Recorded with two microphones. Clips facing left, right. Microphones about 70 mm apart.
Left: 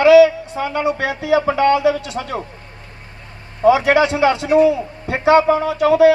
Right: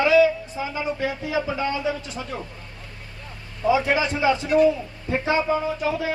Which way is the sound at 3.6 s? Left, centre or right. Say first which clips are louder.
Left 8 dB; left.